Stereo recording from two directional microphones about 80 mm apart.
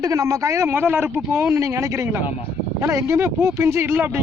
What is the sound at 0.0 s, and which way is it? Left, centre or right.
Speech, right.